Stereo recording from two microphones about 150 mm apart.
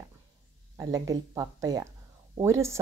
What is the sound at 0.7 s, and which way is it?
Speech, 25° right (ahead or behind).